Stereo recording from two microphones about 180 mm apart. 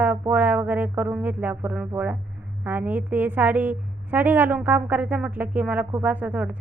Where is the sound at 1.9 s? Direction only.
10° right (ahead or behind).